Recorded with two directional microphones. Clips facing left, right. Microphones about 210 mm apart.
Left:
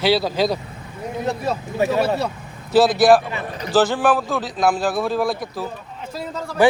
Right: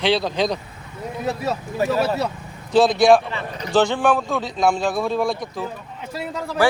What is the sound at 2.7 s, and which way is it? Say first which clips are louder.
A man's voice: left 1 dB; 5° left (ahead or behind).